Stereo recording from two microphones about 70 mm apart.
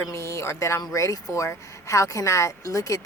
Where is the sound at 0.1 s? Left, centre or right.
Left.